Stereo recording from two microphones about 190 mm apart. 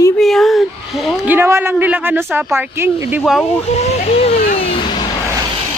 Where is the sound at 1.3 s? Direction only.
10° right (ahead or behind).